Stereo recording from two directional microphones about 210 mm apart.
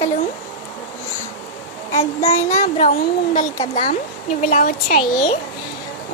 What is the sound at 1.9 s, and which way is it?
Child singing, 30° left (ahead or behind).